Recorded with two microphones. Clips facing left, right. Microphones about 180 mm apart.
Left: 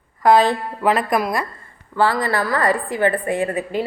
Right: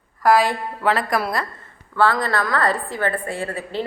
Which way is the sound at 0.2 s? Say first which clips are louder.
Left 3 dB; 20° left (ahead or behind).